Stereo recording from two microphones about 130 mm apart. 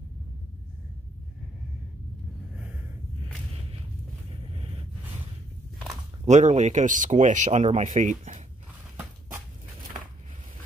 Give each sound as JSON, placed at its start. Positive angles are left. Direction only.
{"t": 2.5, "sound": "gasp", "side_deg": -15}
{"t": 4.6, "sound": "a sound", "side_deg": -45}
{"t": 6.2, "sound": "speech", "side_deg": -65}